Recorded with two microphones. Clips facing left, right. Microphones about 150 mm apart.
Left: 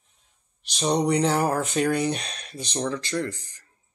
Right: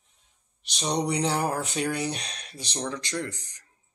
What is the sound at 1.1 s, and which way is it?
Speech, 50° left (ahead or behind).